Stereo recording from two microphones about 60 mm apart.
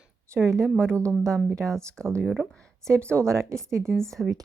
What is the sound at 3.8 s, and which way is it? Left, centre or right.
Speech, centre.